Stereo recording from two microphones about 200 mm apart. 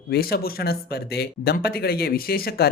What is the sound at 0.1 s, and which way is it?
Speech, 50° left (ahead or behind).